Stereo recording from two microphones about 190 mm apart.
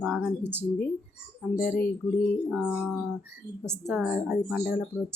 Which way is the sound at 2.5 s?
5° right (ahead or behind).